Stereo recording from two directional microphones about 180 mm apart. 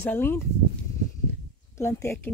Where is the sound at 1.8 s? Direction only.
15° left (ahead or behind).